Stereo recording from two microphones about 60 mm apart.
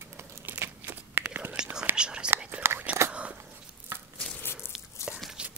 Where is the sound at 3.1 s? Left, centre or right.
Right.